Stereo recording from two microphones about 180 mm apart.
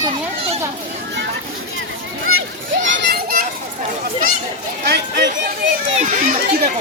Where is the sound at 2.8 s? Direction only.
75° right (ahead or behind); by 3.4 s 60° right (ahead or behind).